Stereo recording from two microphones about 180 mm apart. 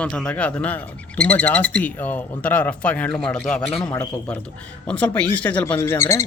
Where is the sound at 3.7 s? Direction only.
30° left (ahead or behind).